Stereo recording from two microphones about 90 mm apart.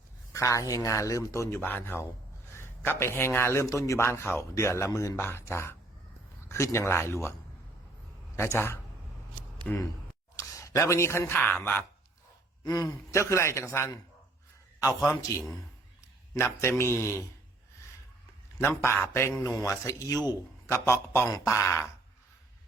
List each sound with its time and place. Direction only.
0.3 s a man's voice: 35° left (ahead or behind)
8.5 s a man's voice: 25° left (ahead or behind)
9.7 s speech: 10° left (ahead or behind)
10.3 s a sound: 35° left (ahead or behind)
11.3 s a man's voice: 20° left (ahead or behind)
12.6 s a man's voice: 40° left (ahead or behind)
16.3 s a man's voice: 30° left (ahead or behind)
18.8 s a man's voice: 25° left (ahead or behind)